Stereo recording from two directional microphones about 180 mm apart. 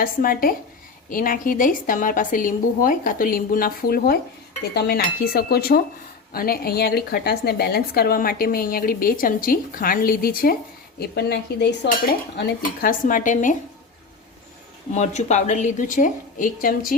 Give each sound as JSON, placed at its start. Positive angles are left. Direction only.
{"t": 0.0, "sound": "a woman's voice", "side_deg": 50}
{"t": 11.1, "sound": "a woman's voice", "side_deg": 65}
{"t": 12.8, "sound": "a woman's voice", "side_deg": 50}
{"t": 14.9, "sound": "a woman's voice", "side_deg": 40}